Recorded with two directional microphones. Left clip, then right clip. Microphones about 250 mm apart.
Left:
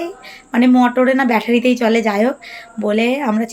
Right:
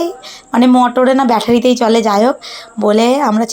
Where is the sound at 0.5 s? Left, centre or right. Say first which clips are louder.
Right 3 dB; centre.